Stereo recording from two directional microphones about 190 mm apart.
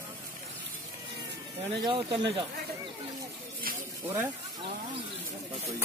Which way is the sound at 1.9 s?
25° right (ahead or behind).